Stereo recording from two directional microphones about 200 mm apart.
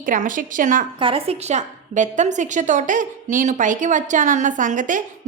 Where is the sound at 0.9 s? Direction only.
25° right (ahead or behind).